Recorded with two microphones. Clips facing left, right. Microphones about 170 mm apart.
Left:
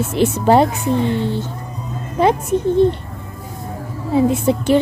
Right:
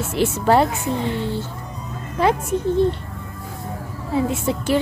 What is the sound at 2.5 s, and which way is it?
Speech, 20° left (ahead or behind).